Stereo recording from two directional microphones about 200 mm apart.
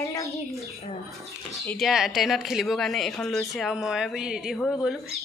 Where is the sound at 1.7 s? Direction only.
Centre (ahead or behind).